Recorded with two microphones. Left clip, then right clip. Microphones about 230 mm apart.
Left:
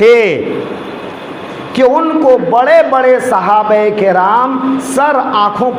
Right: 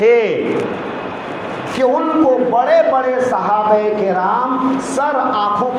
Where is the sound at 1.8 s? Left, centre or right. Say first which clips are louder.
Left 5 dB; left.